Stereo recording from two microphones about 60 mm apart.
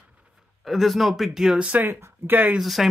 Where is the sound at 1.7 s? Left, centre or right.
Right.